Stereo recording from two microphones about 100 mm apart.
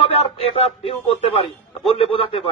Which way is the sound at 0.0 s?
80° left.